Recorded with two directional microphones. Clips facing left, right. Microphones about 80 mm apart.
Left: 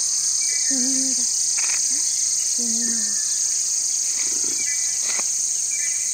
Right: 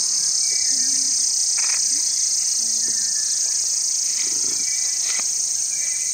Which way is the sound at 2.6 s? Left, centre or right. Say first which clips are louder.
Left 14 dB; left.